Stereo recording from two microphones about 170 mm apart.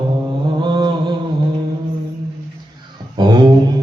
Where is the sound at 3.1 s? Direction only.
25° right (ahead or behind).